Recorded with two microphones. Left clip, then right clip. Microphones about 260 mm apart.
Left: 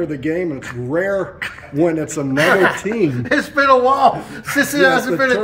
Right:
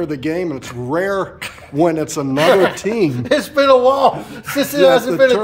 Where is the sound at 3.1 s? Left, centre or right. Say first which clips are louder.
Right 1 dB; right.